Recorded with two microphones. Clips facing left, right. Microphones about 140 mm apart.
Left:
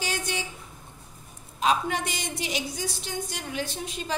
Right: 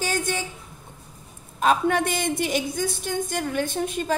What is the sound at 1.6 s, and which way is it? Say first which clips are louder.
A woman's voice: right 5 dB; 50° right (ahead or behind).